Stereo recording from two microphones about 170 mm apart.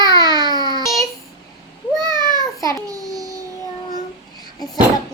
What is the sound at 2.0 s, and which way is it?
Cat, 25° right (ahead or behind).